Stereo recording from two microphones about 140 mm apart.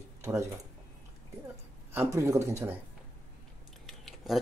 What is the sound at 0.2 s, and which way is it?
Speech, 20° right (ahead or behind).